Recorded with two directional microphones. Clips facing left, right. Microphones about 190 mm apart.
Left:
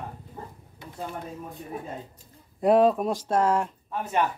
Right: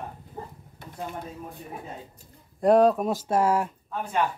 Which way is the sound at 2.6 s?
Centre (ahead or behind).